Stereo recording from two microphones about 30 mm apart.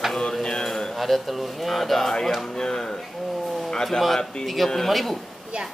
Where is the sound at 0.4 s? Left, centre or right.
Left.